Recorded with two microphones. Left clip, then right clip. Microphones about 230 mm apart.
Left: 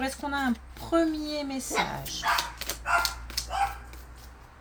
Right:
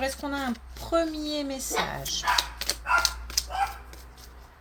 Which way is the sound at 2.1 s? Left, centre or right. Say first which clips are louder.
Right 2 dB; centre.